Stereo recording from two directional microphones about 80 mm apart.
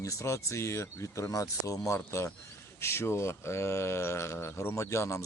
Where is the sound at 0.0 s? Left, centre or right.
Left.